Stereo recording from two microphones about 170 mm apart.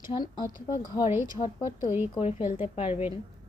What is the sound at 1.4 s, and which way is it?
A woman's voice, 45° left (ahead or behind).